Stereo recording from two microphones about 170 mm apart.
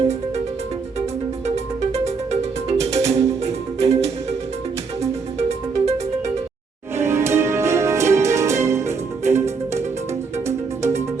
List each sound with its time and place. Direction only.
1.5 s music: 40° right (ahead or behind)
5.4 s music: 40° right (ahead or behind)
6.9 s music: 15° right (ahead or behind)